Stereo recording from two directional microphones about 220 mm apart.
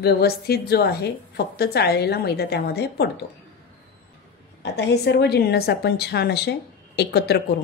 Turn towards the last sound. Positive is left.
turn(degrees=45)  # may be behind; listen again after turning